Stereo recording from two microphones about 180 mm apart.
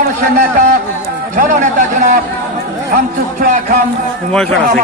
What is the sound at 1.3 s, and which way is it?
A man's voice, 45° right (ahead or behind).